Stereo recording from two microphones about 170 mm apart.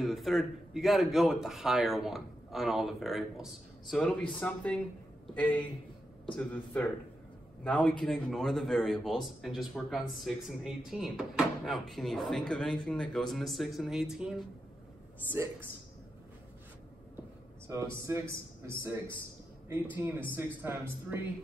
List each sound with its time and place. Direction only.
0.0 s a man's voice: centre (ahead or behind)
17.6 s speech: 15° right (ahead or behind)
20.3 s speech: 15° right (ahead or behind)